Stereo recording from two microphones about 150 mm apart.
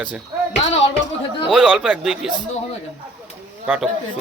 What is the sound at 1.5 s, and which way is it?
Speech, centre (ahead or behind).